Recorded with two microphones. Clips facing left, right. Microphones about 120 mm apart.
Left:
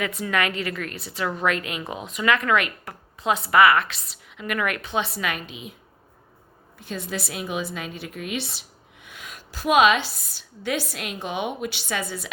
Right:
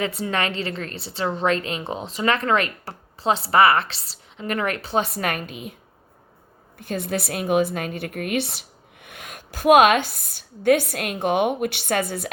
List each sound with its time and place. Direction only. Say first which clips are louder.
0.0 s a woman's voice: right 1 dB; 30° right (ahead or behind); by 5.7 s 50° right (ahead or behind)
6.7 s a woman's voice: right 5 dB; 55° right (ahead or behind)